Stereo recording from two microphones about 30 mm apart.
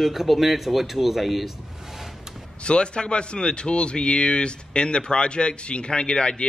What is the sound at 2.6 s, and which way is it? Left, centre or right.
A man's voice, left.